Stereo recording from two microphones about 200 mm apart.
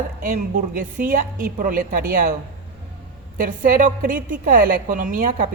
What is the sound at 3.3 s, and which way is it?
A woman's voice, 45° right (ahead or behind).